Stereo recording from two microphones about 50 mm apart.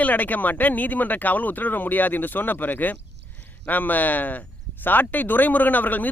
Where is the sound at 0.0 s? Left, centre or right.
Left.